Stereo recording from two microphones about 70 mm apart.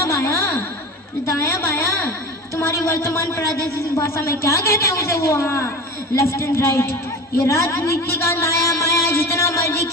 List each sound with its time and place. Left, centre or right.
0.0 s music: left
1.3 s a woman's voice: left